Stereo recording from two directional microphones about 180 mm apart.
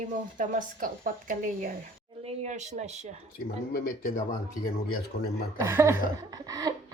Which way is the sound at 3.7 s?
50° left (ahead or behind).